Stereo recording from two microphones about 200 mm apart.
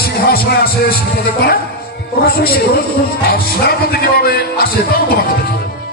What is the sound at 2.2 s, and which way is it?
A man's voice, 50° left (ahead or behind).